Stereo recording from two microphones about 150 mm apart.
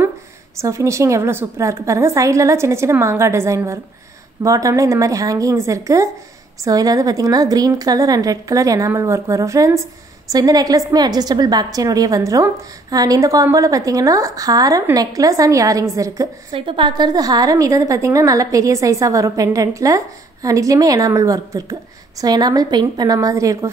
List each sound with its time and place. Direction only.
0.6 s a woman's voice: 20° right (ahead or behind)
16.5 s a woman's voice: 35° right (ahead or behind)